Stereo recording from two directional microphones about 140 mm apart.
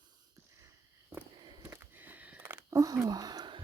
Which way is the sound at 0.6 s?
20° right (ahead or behind).